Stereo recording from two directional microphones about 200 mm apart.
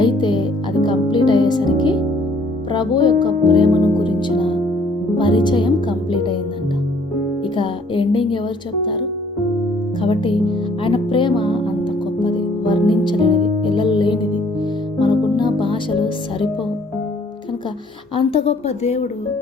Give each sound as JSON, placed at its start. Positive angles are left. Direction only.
{"t": 0.0, "sound": "music", "side_deg": 25}
{"t": 7.5, "sound": "music", "side_deg": 25}
{"t": 10.0, "sound": "music", "side_deg": 25}
{"t": 18.2, "sound": "a woman's voice", "side_deg": 30}